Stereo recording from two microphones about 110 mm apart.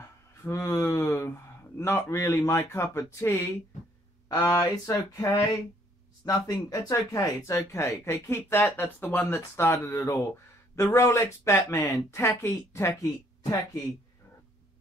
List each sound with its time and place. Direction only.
0.4 s speech: 25° left (ahead or behind)